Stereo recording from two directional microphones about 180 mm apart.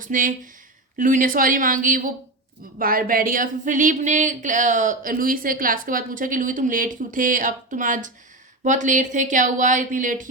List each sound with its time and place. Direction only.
0.0 s speech: 45° right (ahead or behind)